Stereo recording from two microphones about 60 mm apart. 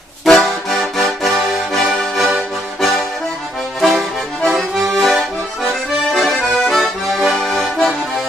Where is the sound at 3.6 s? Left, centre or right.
Centre.